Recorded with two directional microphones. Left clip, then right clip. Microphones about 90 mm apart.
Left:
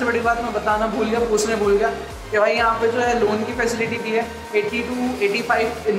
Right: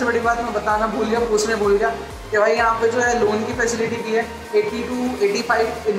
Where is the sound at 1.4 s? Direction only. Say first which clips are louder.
Right 1 dB; 35° right (ahead or behind).